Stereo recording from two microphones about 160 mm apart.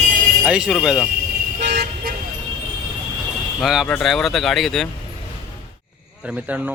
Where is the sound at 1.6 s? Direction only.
90° right.